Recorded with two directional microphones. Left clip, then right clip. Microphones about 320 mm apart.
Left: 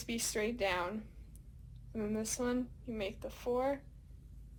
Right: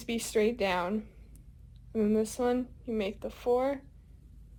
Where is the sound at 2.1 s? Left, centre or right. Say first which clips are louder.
Right 6 dB; right.